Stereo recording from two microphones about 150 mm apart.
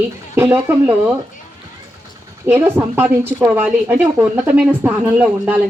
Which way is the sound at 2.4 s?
15° right (ahead or behind).